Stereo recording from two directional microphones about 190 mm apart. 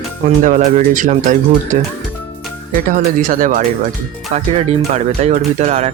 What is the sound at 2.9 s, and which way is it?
Speech, 45° right (ahead or behind).